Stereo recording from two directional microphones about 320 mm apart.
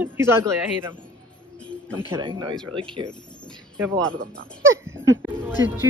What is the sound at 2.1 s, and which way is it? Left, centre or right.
Speech, centre.